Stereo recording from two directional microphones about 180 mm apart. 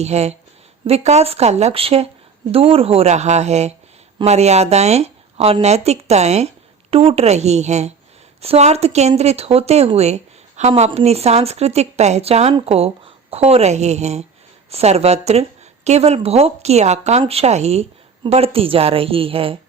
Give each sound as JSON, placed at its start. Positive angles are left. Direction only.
{"t": 0.0, "sound": "a woman's voice", "side_deg": -35}